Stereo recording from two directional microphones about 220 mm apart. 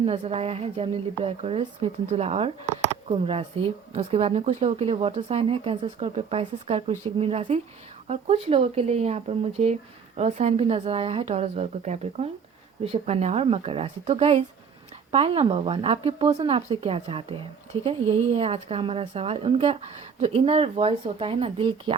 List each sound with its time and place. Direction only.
0.0 s a woman's voice: 25° right (ahead or behind)